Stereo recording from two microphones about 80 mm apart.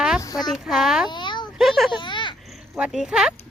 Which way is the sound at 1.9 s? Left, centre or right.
Left.